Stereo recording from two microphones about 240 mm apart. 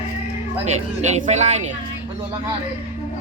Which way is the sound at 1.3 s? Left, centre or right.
Right.